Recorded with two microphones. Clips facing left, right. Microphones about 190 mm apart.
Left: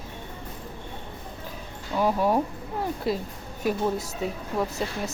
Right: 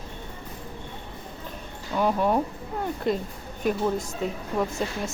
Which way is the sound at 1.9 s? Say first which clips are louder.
Even; 10° left (ahead or behind).